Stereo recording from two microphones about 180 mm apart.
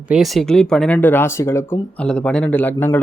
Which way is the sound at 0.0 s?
5° right (ahead or behind).